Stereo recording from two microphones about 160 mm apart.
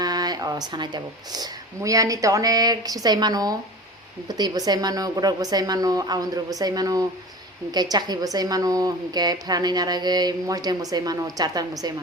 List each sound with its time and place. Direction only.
0.0 s a woman's voice: 25° right (ahead or behind)